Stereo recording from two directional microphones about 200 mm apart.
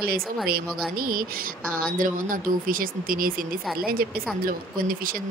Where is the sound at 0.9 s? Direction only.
45° right (ahead or behind).